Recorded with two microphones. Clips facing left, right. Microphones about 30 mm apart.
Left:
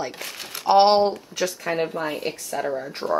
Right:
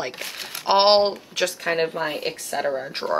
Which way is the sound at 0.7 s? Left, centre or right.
Right.